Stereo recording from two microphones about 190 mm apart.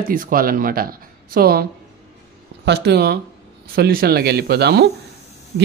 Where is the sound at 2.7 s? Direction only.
60° right (ahead or behind).